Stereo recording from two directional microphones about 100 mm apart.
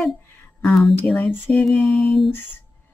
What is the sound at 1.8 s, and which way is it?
Female singing, centre (ahead or behind).